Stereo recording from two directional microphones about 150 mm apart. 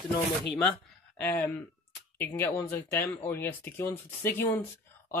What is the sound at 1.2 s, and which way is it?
Speech, 15° left (ahead or behind).